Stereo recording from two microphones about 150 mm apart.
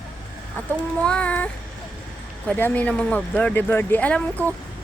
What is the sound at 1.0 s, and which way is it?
A woman's voice, 10° left (ahead or behind).